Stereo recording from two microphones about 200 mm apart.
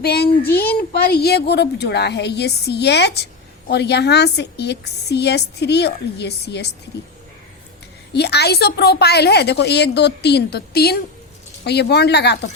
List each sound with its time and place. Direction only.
0.0 s a child's voice: 55° left (ahead or behind)
8.1 s a child's voice: 55° left (ahead or behind)